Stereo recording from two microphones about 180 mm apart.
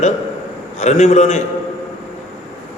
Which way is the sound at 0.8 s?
40° left (ahead or behind).